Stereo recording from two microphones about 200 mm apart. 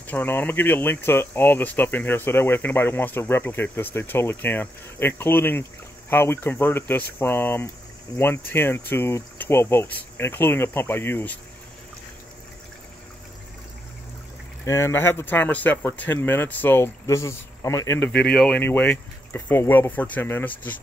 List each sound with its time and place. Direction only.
0.0 s speech: 10° left (ahead or behind)
14.6 s speech: 15° left (ahead or behind)